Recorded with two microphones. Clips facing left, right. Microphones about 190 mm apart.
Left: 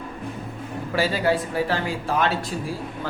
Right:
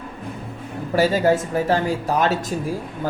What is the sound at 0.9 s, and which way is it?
Speech, 45° right (ahead or behind).